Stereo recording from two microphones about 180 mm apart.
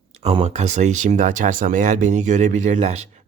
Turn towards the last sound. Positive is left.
turn(degrees=-35)  # may be behind; listen again after turning